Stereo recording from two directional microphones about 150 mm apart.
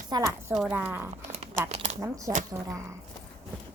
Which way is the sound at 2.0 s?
20° right (ahead or behind).